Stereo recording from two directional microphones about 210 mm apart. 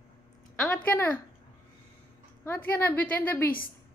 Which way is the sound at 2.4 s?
10° left (ahead or behind).